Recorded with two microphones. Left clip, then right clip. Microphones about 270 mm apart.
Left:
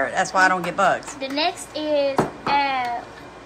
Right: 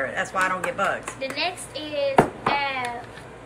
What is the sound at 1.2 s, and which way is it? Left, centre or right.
A child's voice, left.